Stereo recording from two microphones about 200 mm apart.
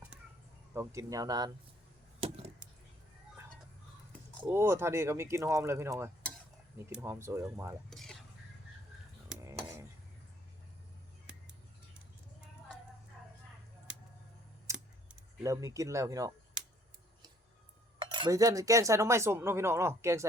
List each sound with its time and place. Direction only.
0.7 s speech: 15° right (ahead or behind)
2.2 s chop: 30° right (ahead or behind)
4.4 s speech: 15° right (ahead or behind)
7.9 s a sound: centre (ahead or behind)
9.4 s a sound: 15° right (ahead or behind)
14.7 s scissors: 15° right (ahead or behind)
15.4 s speech: 15° right (ahead or behind)
18.0 s speech: 25° right (ahead or behind)